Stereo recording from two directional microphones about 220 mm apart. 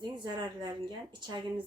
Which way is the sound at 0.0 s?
20° right (ahead or behind).